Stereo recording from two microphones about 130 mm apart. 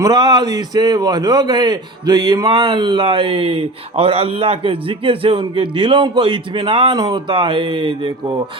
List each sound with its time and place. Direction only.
0.0 s a man's voice: 35° right (ahead or behind)
2.5 s speech: 40° right (ahead or behind)
6.9 s a man's voice: 35° right (ahead or behind)